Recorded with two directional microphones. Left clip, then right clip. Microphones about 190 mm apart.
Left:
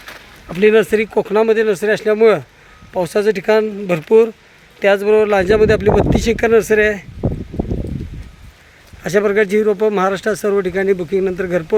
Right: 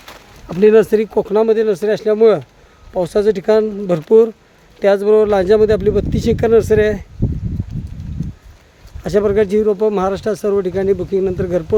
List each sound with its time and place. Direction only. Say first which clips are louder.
0.4 s speech: right 2 dB; 35° right (ahead or behind); by 7.0 s 15° right (ahead or behind)
9.0 s speech: even; 15° right (ahead or behind)